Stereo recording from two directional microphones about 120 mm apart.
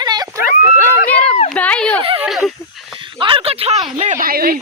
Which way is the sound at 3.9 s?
70° right (ahead or behind).